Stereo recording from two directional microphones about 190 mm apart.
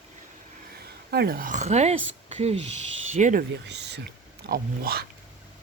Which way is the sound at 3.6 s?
65° right (ahead or behind).